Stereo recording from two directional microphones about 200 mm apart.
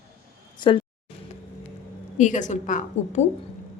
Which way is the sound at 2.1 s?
40° left (ahead or behind).